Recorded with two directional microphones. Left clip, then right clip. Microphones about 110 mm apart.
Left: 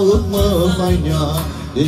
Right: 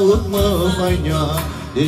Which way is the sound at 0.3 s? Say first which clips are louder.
Left 1 dB; 10° left (ahead or behind).